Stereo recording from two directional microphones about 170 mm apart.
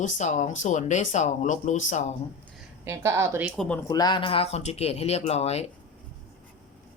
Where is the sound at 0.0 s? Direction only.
45° left (ahead or behind).